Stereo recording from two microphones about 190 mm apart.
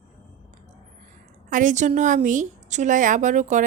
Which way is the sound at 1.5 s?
40° right (ahead or behind).